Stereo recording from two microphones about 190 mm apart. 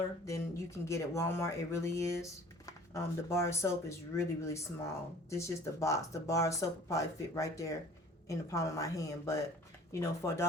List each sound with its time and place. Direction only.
0.3 s speech: 15° left (ahead or behind)